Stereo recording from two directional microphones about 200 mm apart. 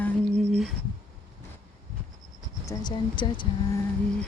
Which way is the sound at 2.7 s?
20° left (ahead or behind).